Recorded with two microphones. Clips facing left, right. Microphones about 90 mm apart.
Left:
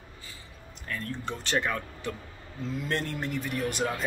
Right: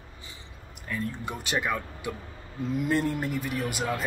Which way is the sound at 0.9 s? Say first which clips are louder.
Right 2 dB; 10° right (ahead or behind).